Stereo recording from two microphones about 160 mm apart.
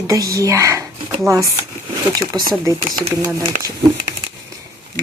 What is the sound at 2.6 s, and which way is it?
A woman's voice, 20° right (ahead or behind).